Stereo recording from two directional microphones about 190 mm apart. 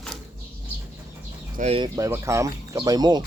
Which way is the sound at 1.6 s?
30° right (ahead or behind).